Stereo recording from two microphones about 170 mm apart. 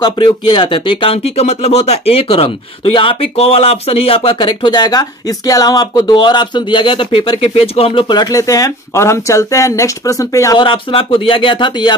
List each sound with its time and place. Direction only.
0.0 s speech: 30° left (ahead or behind)